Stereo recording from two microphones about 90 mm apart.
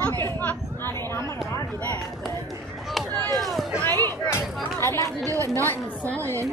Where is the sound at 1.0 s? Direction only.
30° left (ahead or behind).